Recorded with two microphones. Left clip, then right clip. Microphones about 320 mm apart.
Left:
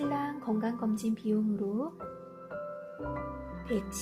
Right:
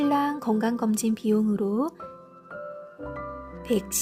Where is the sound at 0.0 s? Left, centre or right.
Right.